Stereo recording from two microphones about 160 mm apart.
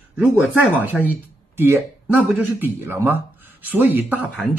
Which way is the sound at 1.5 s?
15° right (ahead or behind).